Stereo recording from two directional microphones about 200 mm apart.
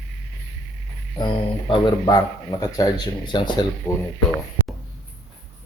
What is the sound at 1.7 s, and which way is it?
Speech, 25° left (ahead or behind).